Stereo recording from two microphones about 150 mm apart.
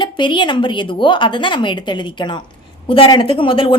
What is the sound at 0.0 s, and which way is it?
A woman's voice, 30° left (ahead or behind).